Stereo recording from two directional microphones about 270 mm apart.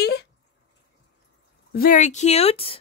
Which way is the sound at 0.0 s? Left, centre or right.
Left.